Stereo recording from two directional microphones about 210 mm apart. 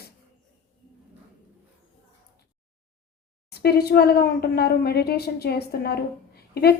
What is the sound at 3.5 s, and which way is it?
A woman's voice, 50° left (ahead or behind).